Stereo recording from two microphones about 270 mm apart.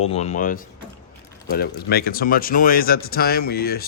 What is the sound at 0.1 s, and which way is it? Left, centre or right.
Speech, left.